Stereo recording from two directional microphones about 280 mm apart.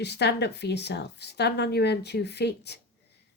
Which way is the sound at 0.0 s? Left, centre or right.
Left.